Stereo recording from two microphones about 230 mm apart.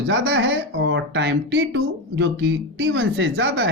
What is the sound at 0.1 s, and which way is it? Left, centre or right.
Speech, right.